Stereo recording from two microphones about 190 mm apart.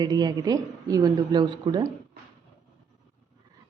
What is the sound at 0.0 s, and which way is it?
A woman's voice, 20° right (ahead or behind).